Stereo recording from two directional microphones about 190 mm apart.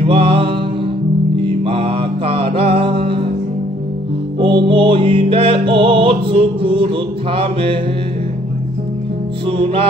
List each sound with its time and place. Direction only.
0.0 s music: 30° right (ahead or behind)
4.4 s music: 25° right (ahead or behind)
7.3 s mantra: 30° right (ahead or behind)
9.5 s mantra: 30° right (ahead or behind)